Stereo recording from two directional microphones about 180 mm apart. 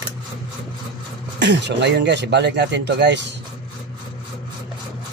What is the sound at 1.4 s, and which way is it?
Speech, 75° right (ahead or behind).